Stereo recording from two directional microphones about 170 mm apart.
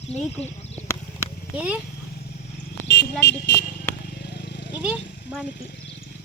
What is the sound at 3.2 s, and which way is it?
Speech, 90° left.